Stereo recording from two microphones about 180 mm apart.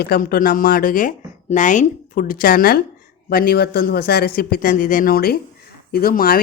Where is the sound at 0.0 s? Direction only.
60° left (ahead or behind).